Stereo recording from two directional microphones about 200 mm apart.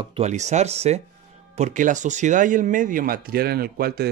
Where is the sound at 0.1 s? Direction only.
35° right (ahead or behind).